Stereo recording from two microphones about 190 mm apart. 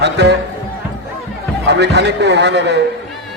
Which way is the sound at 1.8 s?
60° right (ahead or behind).